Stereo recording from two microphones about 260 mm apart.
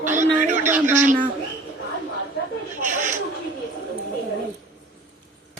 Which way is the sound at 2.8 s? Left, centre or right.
Right.